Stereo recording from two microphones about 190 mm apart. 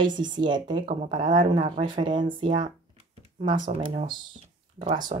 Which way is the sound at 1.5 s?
30° right (ahead or behind).